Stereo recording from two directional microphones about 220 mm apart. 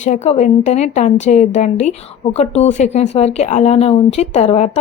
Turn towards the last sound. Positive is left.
turn(degrees=30)  # may be behind; listen again after turning